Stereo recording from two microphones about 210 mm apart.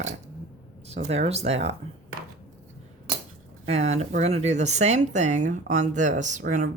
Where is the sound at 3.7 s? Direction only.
30° right (ahead or behind).